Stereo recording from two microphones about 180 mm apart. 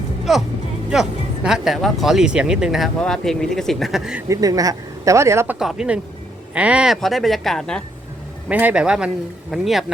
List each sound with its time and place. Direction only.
0.3 s speech: centre (ahead or behind)
4.3 s speech: 20° right (ahead or behind)
5.5 s speech: 5° right (ahead or behind)
8.4 s speech: 10° right (ahead or behind)